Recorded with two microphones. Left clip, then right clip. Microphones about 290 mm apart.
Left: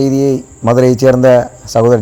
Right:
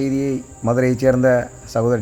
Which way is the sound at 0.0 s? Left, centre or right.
Centre.